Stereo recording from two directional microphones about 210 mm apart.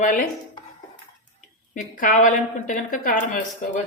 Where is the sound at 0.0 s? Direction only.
40° left (ahead or behind).